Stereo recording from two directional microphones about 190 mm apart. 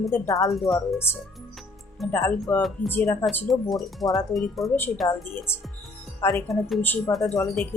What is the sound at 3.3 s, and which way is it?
Speech, centre (ahead or behind).